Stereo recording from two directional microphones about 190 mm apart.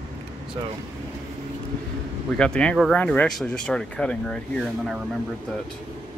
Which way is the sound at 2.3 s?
5° left (ahead or behind).